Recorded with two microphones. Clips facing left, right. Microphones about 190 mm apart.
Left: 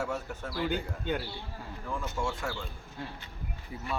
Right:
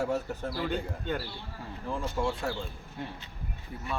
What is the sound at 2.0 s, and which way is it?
Speech, 35° right (ahead or behind).